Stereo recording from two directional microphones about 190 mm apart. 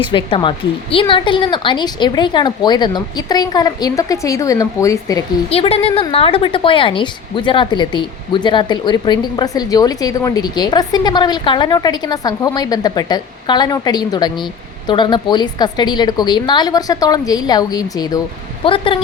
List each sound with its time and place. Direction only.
0.0 s a woman's voice: 25° left (ahead or behind)
5.5 s a woman's voice: 30° left (ahead or behind)